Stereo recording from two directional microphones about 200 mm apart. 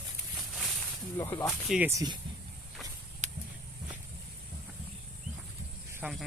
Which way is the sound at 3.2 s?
35° right (ahead or behind).